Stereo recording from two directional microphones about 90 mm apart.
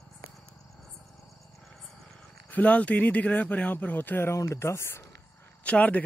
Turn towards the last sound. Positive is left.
turn(degrees=15)  # may be behind; listen again after turning